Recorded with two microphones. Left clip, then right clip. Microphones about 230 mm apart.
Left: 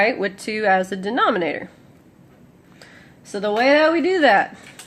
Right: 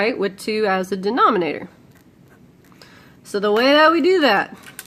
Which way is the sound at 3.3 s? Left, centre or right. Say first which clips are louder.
Right 1 dB; right.